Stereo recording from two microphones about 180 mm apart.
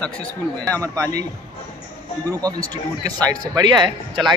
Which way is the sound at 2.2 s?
20° right (ahead or behind).